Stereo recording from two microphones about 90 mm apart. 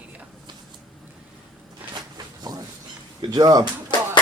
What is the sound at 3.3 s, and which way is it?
Speech, 45° right (ahead or behind).